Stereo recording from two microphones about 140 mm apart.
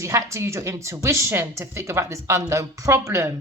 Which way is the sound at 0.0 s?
20° right (ahead or behind).